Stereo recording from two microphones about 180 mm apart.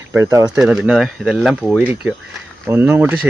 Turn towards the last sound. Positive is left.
turn(degrees=-10)  # may be behind; listen again after turning